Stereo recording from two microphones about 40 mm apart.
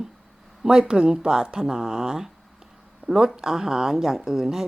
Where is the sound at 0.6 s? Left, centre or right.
Centre.